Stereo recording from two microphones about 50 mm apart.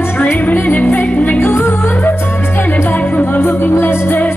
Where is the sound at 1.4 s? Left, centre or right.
Left.